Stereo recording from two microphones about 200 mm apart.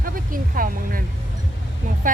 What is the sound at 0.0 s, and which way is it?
Speech, 45° right (ahead or behind).